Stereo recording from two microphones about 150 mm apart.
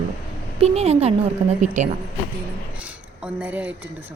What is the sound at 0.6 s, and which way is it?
Speech, 45° right (ahead or behind).